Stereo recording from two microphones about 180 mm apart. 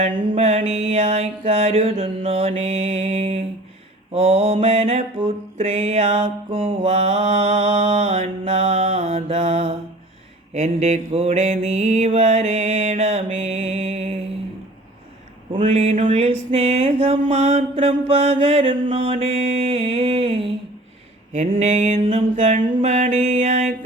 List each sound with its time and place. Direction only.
0.0 s mantra: 35° right (ahead or behind)
15.5 s mantra: 30° right (ahead or behind)